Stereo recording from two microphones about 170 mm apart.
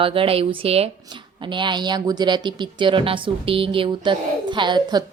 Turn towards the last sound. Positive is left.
turn(degrees=-25)  # may be behind; listen again after turning